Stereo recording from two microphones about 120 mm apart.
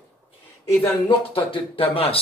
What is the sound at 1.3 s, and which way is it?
Speech, 50° left (ahead or behind).